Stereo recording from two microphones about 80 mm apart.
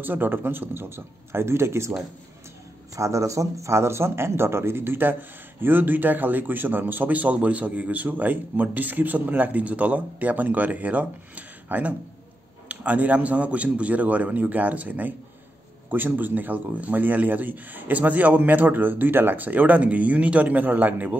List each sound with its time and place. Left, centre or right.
0.0 s a man's voice: right
3.0 s a man's voice: right